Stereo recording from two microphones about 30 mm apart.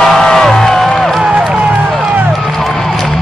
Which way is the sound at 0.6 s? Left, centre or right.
Centre.